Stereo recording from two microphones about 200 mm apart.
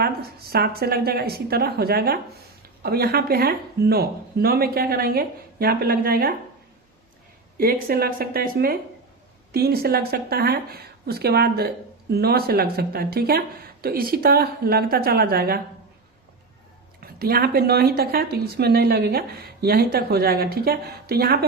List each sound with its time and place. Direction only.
0.0 s a woman's voice: 50° right (ahead or behind)
7.6 s a woman's voice: 50° right (ahead or behind)
17.0 s a woman's voice: 50° right (ahead or behind)